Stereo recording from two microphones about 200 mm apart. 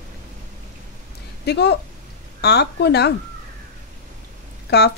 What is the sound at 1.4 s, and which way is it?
Speech, 55° left (ahead or behind).